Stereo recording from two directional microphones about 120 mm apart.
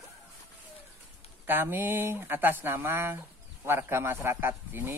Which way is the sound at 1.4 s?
15° right (ahead or behind).